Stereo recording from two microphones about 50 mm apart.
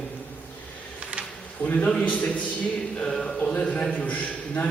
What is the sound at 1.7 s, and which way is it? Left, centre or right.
Speech, left.